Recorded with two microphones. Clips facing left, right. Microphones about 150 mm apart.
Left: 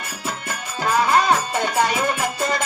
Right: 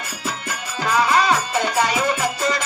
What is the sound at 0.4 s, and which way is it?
Music, 50° left (ahead or behind).